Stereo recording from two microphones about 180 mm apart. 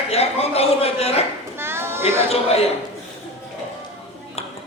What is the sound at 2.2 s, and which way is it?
Speech, 35° left (ahead or behind).